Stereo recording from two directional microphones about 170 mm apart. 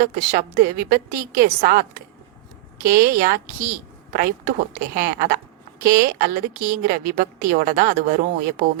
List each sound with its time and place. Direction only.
0.0 s a woman's voice: 55° right (ahead or behind)